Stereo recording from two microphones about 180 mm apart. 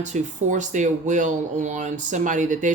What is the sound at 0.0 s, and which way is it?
Speech, 40° right (ahead or behind).